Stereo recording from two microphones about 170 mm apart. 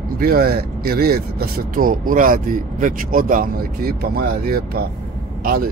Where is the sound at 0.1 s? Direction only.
60° right (ahead or behind).